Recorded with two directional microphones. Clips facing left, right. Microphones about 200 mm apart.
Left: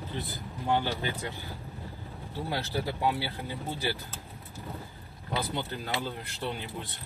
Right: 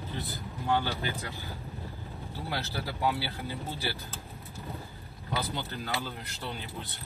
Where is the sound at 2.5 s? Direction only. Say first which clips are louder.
Left 3 dB; 20° left (ahead or behind).